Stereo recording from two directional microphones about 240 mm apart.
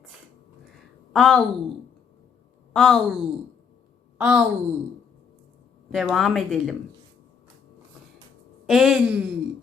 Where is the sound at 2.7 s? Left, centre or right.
Centre.